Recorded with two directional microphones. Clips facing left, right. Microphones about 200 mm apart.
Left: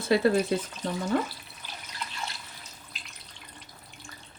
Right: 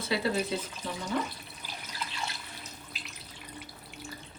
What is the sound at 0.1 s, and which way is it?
Speech, 50° left (ahead or behind).